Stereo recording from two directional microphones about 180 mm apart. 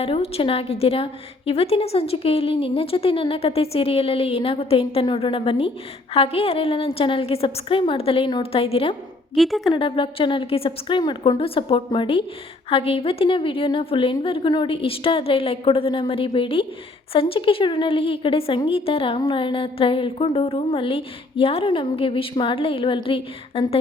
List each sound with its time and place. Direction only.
0.0 s a woman's voice: 35° left (ahead or behind)
9.3 s speech: centre (ahead or behind)
9.7 s a woman's voice: 30° left (ahead or behind)